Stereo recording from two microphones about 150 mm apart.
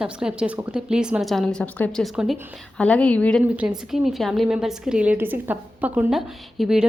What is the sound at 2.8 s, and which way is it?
Speech, 5° left (ahead or behind).